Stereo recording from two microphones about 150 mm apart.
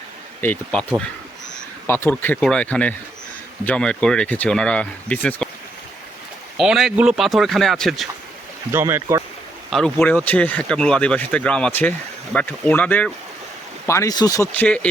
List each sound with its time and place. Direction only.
0.4 s speech: 10° left (ahead or behind)
1.9 s speech: 10° left (ahead or behind)
6.6 s speech: centre (ahead or behind)
8.7 s speech: 15° right (ahead or behind)
9.6 s speech: centre (ahead or behind)
13.8 s speech: 20° left (ahead or behind)
14.6 s speech: 10° left (ahead or behind)